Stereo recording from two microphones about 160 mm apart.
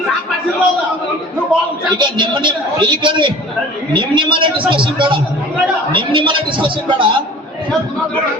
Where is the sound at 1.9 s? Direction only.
30° right (ahead or behind).